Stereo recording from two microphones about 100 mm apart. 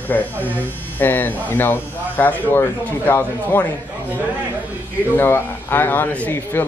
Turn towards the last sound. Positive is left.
turn(degrees=20)  # may be behind; listen again after turning